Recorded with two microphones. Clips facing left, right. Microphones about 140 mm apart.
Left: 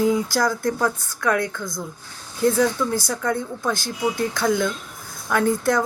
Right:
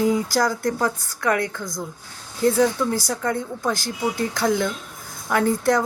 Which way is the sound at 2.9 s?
35° right (ahead or behind).